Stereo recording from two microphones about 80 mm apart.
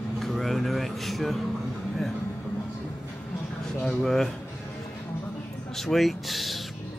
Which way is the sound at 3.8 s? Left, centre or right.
Centre.